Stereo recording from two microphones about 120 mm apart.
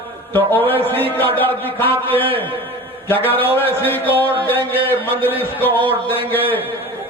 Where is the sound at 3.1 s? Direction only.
15° left (ahead or behind).